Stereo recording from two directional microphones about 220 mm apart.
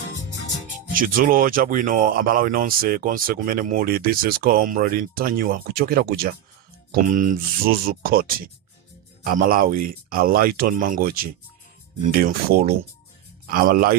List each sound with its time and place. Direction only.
0.9 s speech: 40° right (ahead or behind)